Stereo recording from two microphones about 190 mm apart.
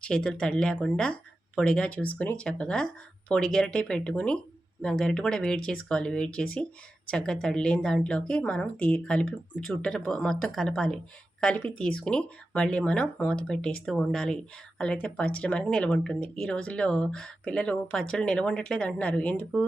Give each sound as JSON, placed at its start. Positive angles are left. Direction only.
{"t": 0.0, "sound": "speech", "side_deg": 5}